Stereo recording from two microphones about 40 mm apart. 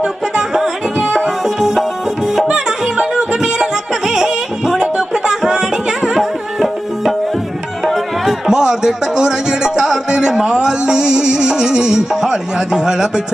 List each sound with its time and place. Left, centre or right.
0.0 s music: centre
2.5 s music: right; by 8.4 s centre
8.4 s music: centre